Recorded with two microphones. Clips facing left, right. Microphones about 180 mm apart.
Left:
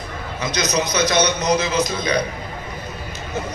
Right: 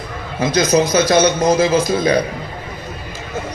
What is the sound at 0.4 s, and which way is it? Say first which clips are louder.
A man's voice: right 8 dB; 50° right (ahead or behind).